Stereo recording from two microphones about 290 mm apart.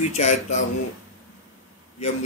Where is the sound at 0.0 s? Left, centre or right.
Left.